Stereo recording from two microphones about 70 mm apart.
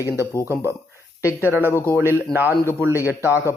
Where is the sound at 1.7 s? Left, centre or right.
Left.